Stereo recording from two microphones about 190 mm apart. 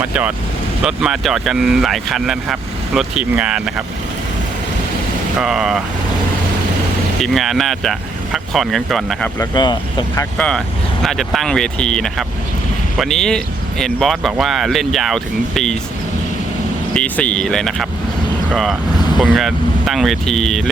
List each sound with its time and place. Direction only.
0.0 s speech: 5° right (ahead or behind)
5.4 s speech: 5° right (ahead or behind)
7.2 s speech: centre (ahead or behind)
9.4 s speech: 25° left (ahead or behind)
10.2 s speech: 5° left (ahead or behind)
16.9 s speech: 5° left (ahead or behind)